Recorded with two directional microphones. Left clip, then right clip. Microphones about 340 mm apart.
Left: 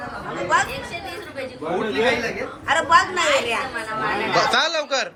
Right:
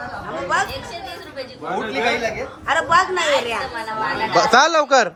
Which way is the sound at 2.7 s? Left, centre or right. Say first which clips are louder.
Even; right.